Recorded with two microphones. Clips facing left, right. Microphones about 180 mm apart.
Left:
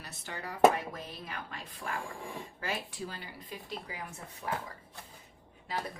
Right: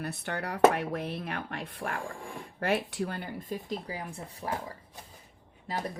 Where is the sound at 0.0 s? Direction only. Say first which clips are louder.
Right 8 dB; 60° right (ahead or behind); by 4.5 s 35° right (ahead or behind).